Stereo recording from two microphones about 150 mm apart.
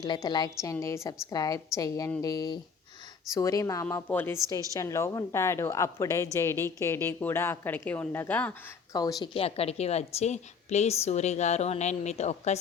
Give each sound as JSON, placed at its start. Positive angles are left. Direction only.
{"t": 0.0, "sound": "a woman's voice", "side_deg": 30}
{"t": 8.9, "sound": "a woman's voice", "side_deg": 25}
{"t": 9.3, "sound": "a woman's voice", "side_deg": 40}